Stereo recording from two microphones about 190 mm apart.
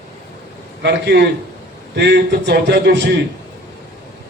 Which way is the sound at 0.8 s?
60° right (ahead or behind).